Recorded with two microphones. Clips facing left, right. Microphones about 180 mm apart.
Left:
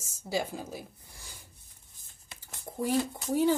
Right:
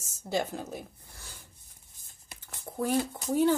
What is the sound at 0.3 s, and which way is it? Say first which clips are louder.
Speech: right 1 dB; 10° left (ahead or behind).